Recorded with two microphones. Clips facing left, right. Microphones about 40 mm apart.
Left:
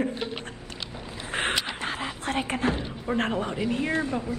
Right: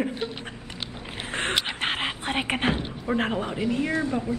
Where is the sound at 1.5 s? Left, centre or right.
Right.